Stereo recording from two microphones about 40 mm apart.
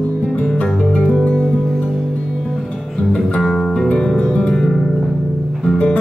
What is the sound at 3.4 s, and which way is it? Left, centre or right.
Music, centre.